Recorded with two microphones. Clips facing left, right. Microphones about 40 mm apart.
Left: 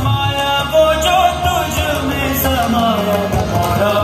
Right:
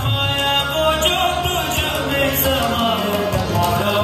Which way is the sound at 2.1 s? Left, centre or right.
Right.